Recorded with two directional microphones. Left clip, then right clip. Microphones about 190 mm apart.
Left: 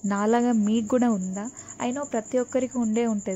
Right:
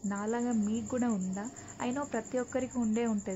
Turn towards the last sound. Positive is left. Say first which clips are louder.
# left 7 dB
turn(degrees=25)  # may be behind; listen again after turning